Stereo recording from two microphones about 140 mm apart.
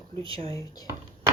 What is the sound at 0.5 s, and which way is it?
Speech, 25° left (ahead or behind).